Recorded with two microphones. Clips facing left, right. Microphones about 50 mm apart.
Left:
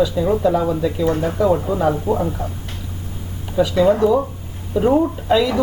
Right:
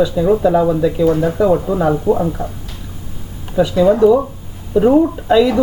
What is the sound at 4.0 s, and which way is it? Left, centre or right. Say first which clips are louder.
Speech: right 5 dB; centre.